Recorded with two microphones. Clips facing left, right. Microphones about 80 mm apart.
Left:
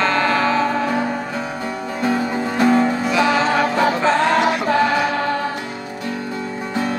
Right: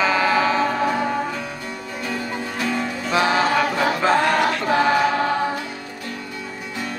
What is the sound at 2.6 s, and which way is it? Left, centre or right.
Music, left.